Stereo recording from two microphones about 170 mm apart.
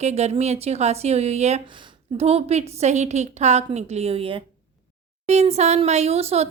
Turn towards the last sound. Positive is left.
turn(degrees=-35)  # may be behind; listen again after turning